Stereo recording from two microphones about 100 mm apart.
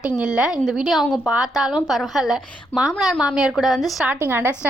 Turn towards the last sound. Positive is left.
turn(degrees=-25)  # may be behind; listen again after turning